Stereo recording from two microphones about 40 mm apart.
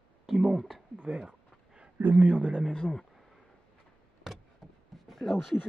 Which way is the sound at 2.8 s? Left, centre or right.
Centre.